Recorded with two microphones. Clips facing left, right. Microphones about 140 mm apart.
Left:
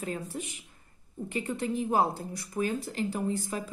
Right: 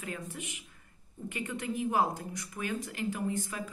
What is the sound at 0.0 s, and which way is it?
Speech, 35° left (ahead or behind).